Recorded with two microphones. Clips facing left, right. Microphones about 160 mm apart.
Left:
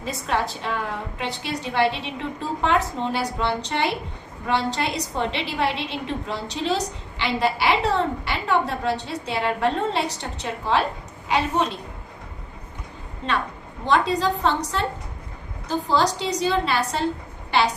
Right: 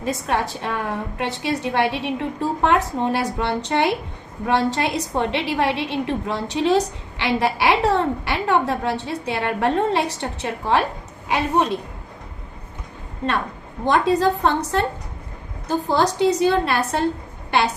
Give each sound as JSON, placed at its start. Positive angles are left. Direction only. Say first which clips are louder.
{"t": 0.0, "sound": "a woman's voice", "louder": "right 3 dB", "side_deg": -55}
{"t": 13.2, "sound": "a woman's voice", "louder": "right 2 dB", "side_deg": -55}